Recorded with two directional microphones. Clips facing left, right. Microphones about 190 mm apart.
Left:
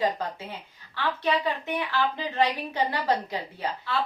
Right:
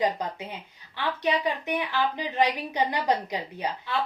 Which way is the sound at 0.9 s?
15° right (ahead or behind).